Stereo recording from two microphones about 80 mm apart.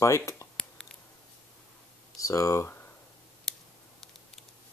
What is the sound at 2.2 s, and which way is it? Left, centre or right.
Speech, left.